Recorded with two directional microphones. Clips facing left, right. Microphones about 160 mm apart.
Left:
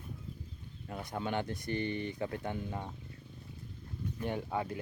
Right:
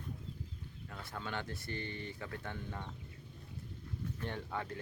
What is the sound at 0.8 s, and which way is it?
Speech, 15° left (ahead or behind).